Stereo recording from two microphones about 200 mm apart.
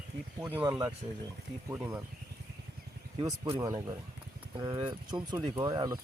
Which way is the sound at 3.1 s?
20° right (ahead or behind).